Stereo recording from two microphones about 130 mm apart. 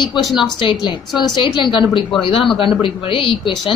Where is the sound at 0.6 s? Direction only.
35° left (ahead or behind).